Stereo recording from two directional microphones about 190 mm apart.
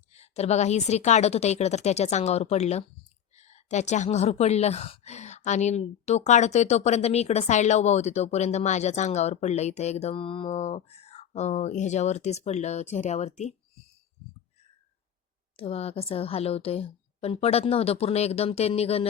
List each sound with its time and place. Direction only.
0.1 s a woman's voice: 35° left (ahead or behind)
15.5 s a woman's voice: 30° left (ahead or behind)